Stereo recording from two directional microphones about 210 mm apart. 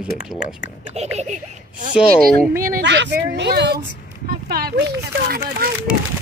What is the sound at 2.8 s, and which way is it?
Speech, 55° right (ahead or behind).